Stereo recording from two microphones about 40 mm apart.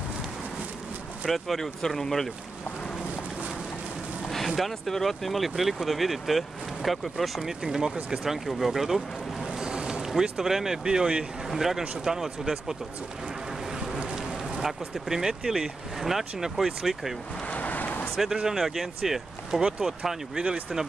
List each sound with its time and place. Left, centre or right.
1.3 s speech: centre
4.5 s speech: centre
7.4 s speech: centre
8.2 s speech: centre
9.4 s boat: centre
10.2 s speech: centre
14.6 s speech: centre
17.5 s vehicle: left
18.3 s speech: centre
18.6 s speech: centre